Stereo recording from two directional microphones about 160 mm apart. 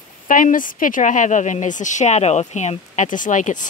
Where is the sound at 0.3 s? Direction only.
55° left (ahead or behind).